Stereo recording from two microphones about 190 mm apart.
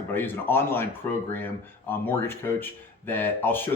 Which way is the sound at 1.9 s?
10° left (ahead or behind).